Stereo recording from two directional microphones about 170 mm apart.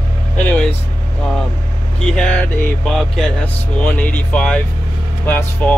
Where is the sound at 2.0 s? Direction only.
5° left (ahead or behind).